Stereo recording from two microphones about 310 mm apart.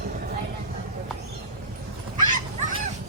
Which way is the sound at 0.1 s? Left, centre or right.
Right.